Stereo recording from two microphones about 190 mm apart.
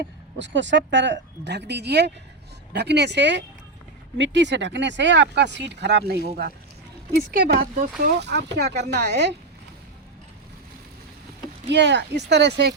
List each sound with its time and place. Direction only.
0.0 s speech: 70° right (ahead or behind)
11.7 s speech: 65° right (ahead or behind)